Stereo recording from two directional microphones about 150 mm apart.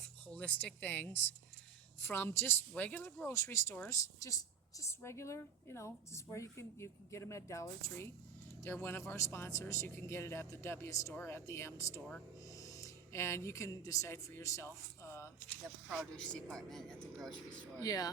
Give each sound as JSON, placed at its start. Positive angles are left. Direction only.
{"t": 0.3, "sound": "a man's voice", "side_deg": 10}
{"t": 15.6, "sound": "speech", "side_deg": 0}
{"t": 17.8, "sound": "speech", "side_deg": 25}